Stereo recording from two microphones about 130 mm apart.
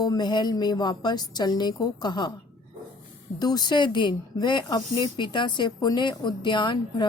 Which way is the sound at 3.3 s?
30° left (ahead or behind).